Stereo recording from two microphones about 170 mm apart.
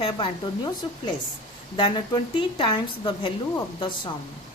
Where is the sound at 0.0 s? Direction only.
25° left (ahead or behind).